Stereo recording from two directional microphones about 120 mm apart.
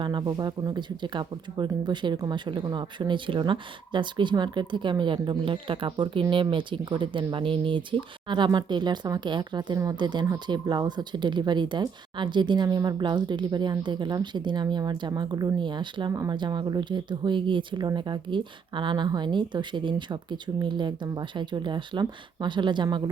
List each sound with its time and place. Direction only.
0.0 s speech: 35° right (ahead or behind)